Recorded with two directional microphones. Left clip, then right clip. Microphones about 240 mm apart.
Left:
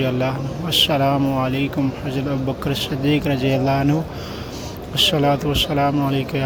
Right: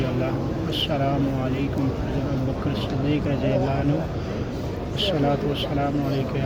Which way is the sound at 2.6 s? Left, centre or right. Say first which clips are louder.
Left 7 dB; left.